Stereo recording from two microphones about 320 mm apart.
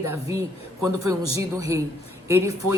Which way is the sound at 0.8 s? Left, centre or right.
Right.